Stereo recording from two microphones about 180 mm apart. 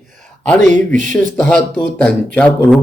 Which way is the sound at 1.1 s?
5° left (ahead or behind).